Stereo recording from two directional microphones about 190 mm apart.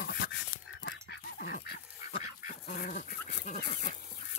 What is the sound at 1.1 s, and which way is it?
Goose, 55° left (ahead or behind).